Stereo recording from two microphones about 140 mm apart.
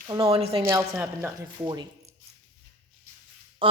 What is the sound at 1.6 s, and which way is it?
Speech, 30° right (ahead or behind).